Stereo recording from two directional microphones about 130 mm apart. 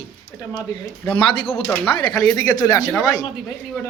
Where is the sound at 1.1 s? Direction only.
45° left (ahead or behind).